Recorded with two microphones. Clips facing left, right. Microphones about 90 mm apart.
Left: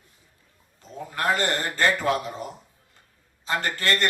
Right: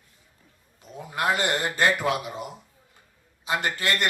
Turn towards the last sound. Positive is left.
turn(degrees=-15)  # may be behind; listen again after turning